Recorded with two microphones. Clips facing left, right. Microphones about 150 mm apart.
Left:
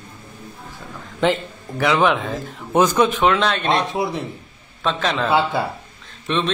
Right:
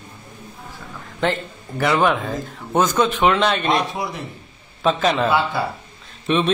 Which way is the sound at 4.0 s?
30° left (ahead or behind).